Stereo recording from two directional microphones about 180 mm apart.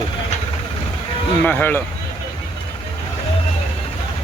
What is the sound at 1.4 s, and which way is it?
Speech, 10° left (ahead or behind).